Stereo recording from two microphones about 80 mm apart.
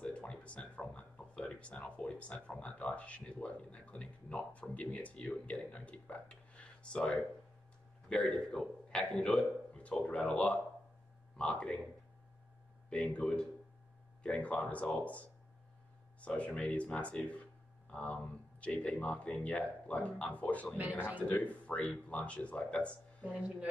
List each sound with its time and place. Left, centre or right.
0.0 s a sound: centre
8.1 s a man's voice: centre
12.9 s speech: centre
23.2 s speech: centre